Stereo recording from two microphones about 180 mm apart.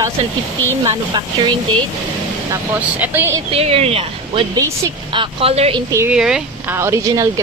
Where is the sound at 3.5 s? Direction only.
35° right (ahead or behind).